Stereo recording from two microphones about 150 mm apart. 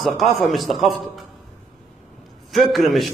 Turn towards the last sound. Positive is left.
turn(degrees=0)  # may be behind; listen again after turning